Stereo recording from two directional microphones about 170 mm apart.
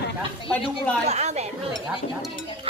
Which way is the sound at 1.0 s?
40° right (ahead or behind).